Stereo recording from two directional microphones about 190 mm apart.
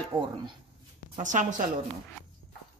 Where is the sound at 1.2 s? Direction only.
40° right (ahead or behind).